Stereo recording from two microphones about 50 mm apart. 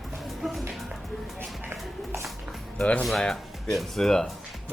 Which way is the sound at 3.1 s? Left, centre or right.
Centre.